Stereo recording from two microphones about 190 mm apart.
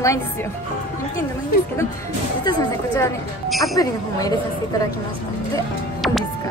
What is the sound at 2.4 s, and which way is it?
Speech, 20° left (ahead or behind).